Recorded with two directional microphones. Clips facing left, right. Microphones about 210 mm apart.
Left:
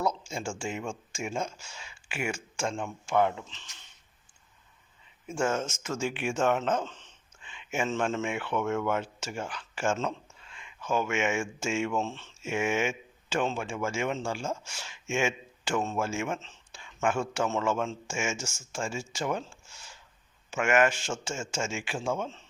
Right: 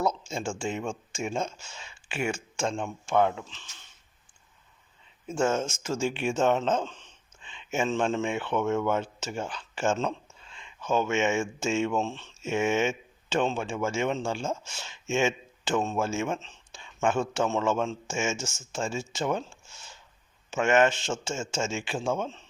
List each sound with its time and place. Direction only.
0.0 s a sound: 25° right (ahead or behind)
0.8 s speech: 20° right (ahead or behind)
5.2 s speech: 25° right (ahead or behind)